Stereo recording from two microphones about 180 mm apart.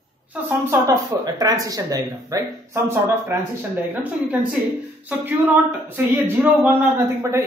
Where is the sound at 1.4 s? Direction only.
20° right (ahead or behind).